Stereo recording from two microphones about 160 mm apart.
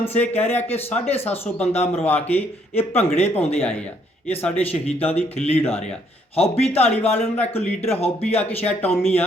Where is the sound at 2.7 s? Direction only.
40° left (ahead or behind).